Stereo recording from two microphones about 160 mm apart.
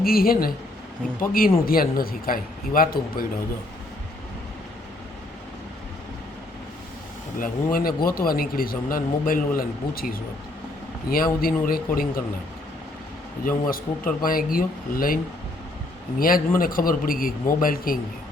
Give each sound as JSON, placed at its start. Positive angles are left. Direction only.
{"t": 0.0, "sound": "speech", "side_deg": 65}
{"t": 1.6, "sound": "speech", "side_deg": 65}
{"t": 7.3, "sound": "speech", "side_deg": 60}
{"t": 13.4, "sound": "speech", "side_deg": 60}